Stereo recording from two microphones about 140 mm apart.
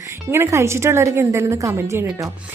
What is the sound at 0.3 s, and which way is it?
A woman's voice, 20° right (ahead or behind).